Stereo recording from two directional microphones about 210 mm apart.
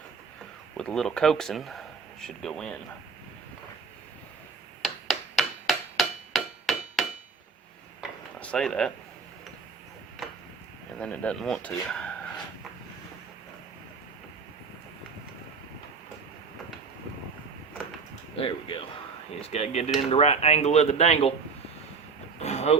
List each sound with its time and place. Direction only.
0.8 s speech: 5° left (ahead or behind)
5.0 s hammer: centre (ahead or behind)
8.4 s speech: 5° left (ahead or behind)
11.0 s speech: 5° left (ahead or behind)
18.3 s a sound: 25° left (ahead or behind)
19.3 s speech: 30° left (ahead or behind)
22.4 s vehicle: 30° left (ahead or behind)